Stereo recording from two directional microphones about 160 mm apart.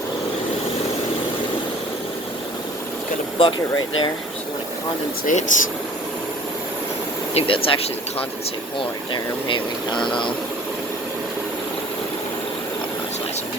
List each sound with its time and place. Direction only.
3.3 s speech: 30° left (ahead or behind)
5.2 s speech: 50° left (ahead or behind)
7.3 s speech: 35° left (ahead or behind)
9.1 s speech: 30° left (ahead or behind)